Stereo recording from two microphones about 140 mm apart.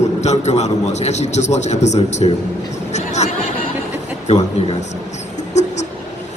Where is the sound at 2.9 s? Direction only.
55° left (ahead or behind).